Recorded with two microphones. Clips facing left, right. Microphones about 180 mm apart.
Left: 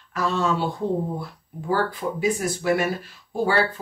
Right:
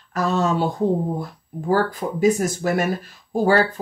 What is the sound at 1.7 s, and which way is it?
Speech, 45° right (ahead or behind).